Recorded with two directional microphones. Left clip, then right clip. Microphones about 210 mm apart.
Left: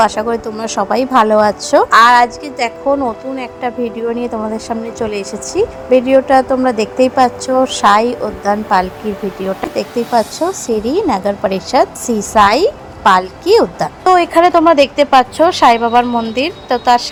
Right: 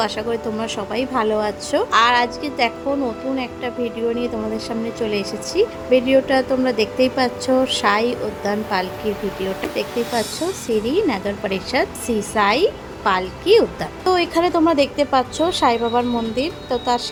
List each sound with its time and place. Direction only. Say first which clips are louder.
0.0 s a woman's voice: left 8 dB; 20° left (ahead or behind)